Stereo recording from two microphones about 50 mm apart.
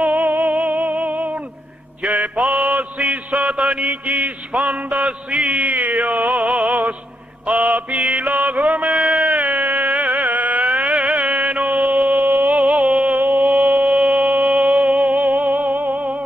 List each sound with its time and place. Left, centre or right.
0.0 s music: right
2.0 s mantra: right
8.9 s a sound: centre
9.2 s music: right
13.2 s a sound: right
14.6 s music: right